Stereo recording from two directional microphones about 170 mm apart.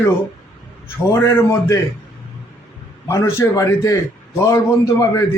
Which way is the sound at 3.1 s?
15° left (ahead or behind).